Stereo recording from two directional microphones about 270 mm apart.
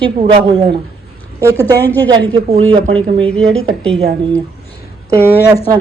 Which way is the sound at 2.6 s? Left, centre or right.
Centre.